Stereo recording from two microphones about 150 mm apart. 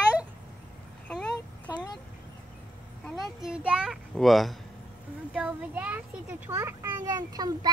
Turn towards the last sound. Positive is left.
turn(degrees=-25)  # may be behind; listen again after turning